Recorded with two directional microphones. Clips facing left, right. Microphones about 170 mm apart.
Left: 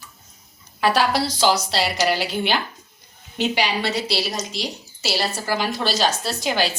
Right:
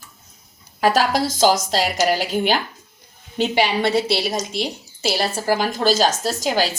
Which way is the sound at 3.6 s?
50° right (ahead or behind).